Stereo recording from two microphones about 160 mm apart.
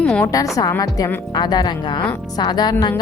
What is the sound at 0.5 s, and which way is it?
A woman's voice, 20° left (ahead or behind).